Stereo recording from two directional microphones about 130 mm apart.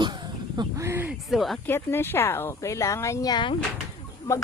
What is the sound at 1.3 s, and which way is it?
Speech, centre (ahead or behind).